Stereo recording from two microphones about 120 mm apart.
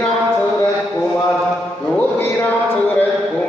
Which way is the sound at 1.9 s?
15° left (ahead or behind).